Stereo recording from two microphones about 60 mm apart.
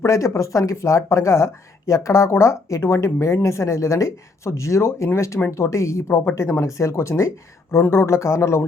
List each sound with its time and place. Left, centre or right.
0.0 s speech: left